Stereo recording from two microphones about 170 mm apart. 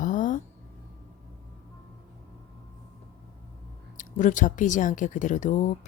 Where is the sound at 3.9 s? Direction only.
50° left (ahead or behind).